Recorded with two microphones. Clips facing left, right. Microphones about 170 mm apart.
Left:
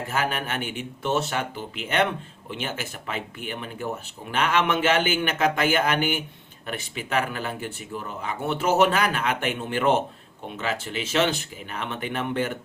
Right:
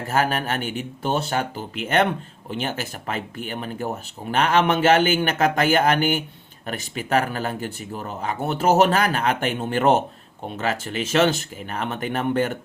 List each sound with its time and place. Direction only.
0.1 s speech: 40° right (ahead or behind)